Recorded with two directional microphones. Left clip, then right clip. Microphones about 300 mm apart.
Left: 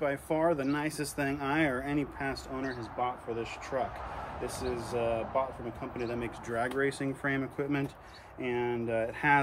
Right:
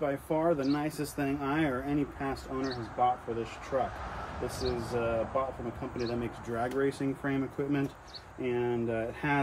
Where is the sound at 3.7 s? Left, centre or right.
Centre.